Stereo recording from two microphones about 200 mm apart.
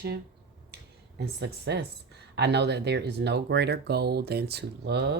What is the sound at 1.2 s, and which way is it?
Speech, 55° right (ahead or behind).